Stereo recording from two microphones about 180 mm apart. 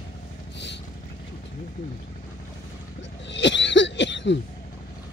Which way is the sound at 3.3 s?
80° left.